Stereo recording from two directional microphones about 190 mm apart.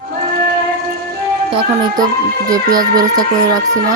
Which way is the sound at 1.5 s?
20° right (ahead or behind).